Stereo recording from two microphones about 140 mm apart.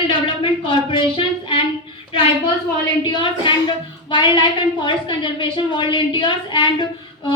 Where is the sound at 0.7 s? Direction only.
35° left (ahead or behind).